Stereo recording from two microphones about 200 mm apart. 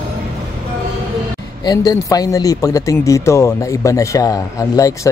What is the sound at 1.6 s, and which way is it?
Speech, 20° left (ahead or behind).